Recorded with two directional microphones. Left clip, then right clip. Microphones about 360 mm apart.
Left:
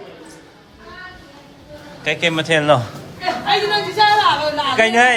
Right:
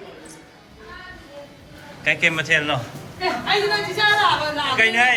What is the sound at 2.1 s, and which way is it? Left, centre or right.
Speech, centre.